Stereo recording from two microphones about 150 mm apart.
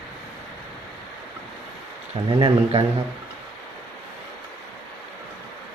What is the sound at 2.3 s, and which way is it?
Speech, 35° right (ahead or behind).